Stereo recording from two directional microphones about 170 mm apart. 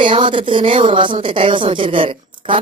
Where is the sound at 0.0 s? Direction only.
30° right (ahead or behind).